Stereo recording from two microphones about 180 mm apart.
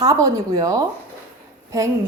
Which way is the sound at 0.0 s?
20° right (ahead or behind).